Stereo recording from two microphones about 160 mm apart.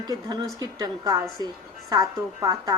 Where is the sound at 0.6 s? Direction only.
25° right (ahead or behind).